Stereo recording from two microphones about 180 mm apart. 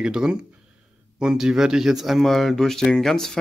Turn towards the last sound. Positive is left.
turn(degrees=5)  # may be behind; listen again after turning